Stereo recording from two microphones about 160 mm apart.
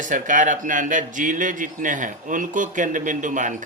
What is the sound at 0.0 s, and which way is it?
A man's voice, 55° right (ahead or behind).